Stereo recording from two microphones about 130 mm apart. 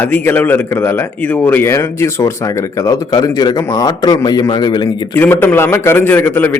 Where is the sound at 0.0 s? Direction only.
15° left (ahead or behind); by 5.0 s 35° left (ahead or behind).